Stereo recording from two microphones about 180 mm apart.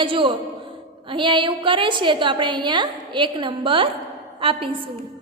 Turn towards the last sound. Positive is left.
turn(degrees=-30)  # may be behind; listen again after turning